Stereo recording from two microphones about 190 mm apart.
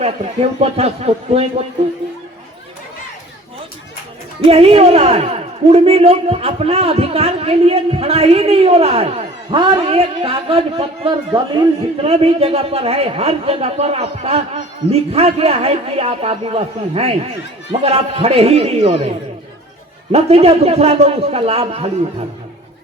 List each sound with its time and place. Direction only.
0.0 s a man's voice: 35° right (ahead or behind)
4.4 s a man's voice: 30° right (ahead or behind)
12.0 s a man's voice: 30° right (ahead or behind)
20.1 s a man's voice: 30° right (ahead or behind)